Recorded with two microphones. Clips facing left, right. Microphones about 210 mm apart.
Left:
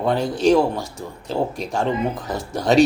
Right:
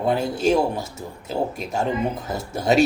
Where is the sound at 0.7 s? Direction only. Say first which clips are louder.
Left 1 dB; 25° right (ahead or behind).